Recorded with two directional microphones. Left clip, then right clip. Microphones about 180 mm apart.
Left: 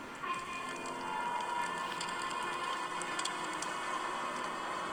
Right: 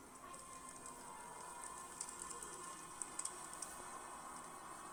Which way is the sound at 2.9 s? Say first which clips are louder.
Left 14 dB; 45° left (ahead or behind).